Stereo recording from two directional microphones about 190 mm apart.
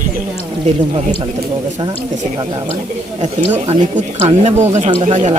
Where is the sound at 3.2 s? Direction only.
40° right (ahead or behind).